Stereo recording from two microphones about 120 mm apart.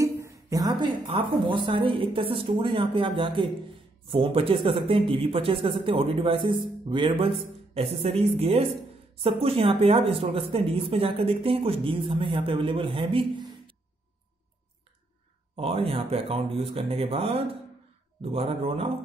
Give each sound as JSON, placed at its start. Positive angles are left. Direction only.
{"t": 0.0, "sound": "a sound", "side_deg": -25}
{"t": 1.1, "sound": "speech", "side_deg": -45}
{"t": 15.5, "sound": "speech", "side_deg": -50}